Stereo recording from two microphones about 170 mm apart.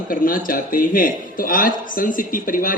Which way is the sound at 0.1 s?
55° left (ahead or behind).